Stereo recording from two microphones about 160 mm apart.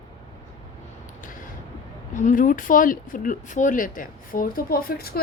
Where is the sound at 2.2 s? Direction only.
55° left (ahead or behind).